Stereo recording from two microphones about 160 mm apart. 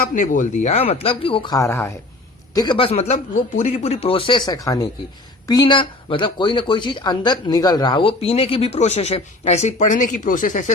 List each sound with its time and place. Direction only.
0.1 s speech: 55° left (ahead or behind); by 1.9 s 20° left (ahead or behind)
2.6 s speech: 30° left (ahead or behind); by 10.7 s 50° left (ahead or behind)